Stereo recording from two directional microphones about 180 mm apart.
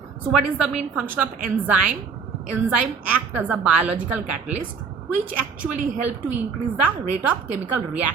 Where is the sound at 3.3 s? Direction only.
10° right (ahead or behind).